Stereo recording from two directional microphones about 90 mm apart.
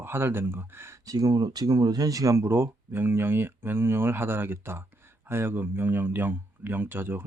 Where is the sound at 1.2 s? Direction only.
45° right (ahead or behind).